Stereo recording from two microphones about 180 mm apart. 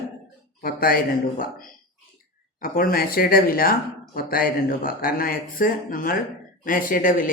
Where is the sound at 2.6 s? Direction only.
55° left (ahead or behind).